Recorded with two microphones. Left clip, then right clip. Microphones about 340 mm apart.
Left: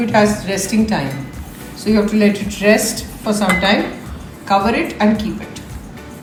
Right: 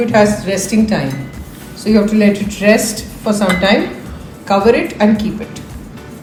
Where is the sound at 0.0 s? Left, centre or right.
Centre.